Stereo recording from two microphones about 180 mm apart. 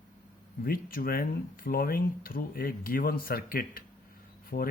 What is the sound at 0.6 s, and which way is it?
Speech, 55° left (ahead or behind).